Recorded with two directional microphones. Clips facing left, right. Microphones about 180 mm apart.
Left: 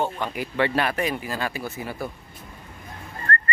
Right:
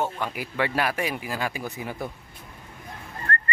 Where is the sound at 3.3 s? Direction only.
10° right (ahead or behind).